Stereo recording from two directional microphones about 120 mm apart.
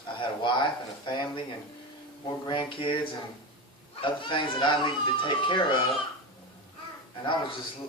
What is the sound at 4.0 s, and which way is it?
A child's voice, 45° left (ahead or behind).